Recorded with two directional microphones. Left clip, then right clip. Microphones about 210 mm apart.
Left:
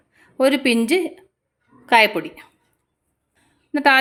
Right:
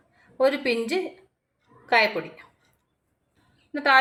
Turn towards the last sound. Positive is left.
turn(degrees=50)  # may be behind; listen again after turning